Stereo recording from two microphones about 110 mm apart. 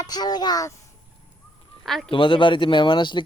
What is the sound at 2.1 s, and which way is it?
Speech, 50° left (ahead or behind).